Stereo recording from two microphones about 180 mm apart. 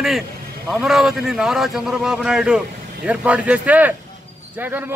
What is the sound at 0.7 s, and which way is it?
A man's voice, centre (ahead or behind).